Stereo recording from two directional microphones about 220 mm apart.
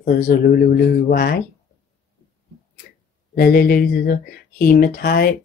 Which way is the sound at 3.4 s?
40° left (ahead or behind).